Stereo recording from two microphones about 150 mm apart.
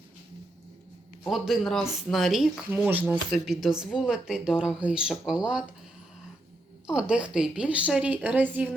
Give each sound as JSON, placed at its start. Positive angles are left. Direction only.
{"t": 1.3, "sound": "a woman's voice", "side_deg": 0}
{"t": 6.9, "sound": "a woman's voice", "side_deg": -5}